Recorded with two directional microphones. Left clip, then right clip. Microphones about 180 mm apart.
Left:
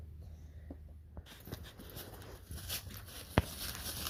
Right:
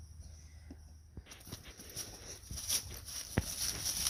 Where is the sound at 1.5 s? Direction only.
15° left (ahead or behind).